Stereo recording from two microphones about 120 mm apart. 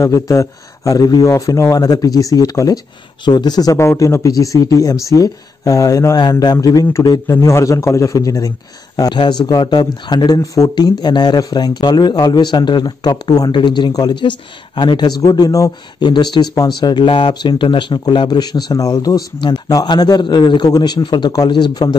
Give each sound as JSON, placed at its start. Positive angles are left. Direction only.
{"t": 0.0, "sound": "a man's voice", "side_deg": 25}